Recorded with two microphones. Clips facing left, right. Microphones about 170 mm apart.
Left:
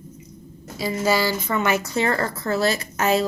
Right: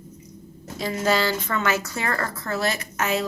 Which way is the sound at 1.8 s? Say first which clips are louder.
Left 5 dB; 25° left (ahead or behind).